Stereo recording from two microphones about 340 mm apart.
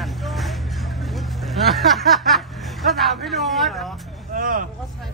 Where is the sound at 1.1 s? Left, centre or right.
Centre.